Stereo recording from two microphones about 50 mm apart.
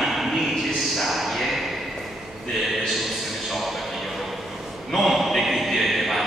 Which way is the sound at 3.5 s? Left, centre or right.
Centre.